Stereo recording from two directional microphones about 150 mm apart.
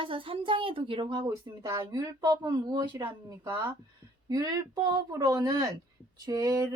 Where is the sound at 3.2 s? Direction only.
20° right (ahead or behind).